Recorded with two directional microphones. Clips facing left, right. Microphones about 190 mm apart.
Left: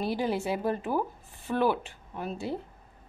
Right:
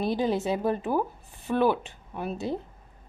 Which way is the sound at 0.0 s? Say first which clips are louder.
Right 3 dB; 20° right (ahead or behind).